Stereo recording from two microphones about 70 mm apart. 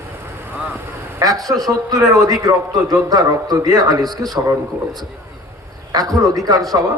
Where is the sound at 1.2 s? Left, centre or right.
Right.